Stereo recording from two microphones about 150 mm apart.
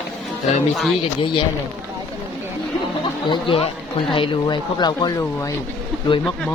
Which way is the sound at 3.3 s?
35° left (ahead or behind).